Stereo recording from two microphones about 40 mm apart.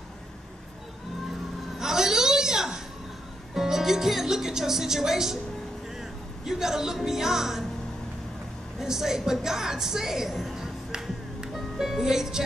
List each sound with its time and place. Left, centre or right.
1.8 s a sound: centre
3.5 s speech: centre
5.9 s vehicle: centre
7.1 s speech: centre
8.7 s a woman's voice: centre